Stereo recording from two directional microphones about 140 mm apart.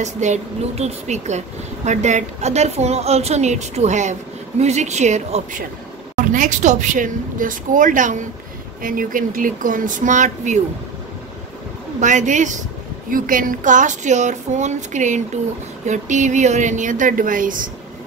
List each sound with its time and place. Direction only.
0.0 s a woman's voice: 55° right (ahead or behind)
8.8 s a woman's voice: 80° right; by 10.6 s 60° right (ahead or behind)
12.0 s speech: 60° right (ahead or behind)
13.1 s speech: 75° right (ahead or behind)